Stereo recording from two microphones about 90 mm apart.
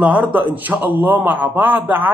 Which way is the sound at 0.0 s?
15° right (ahead or behind).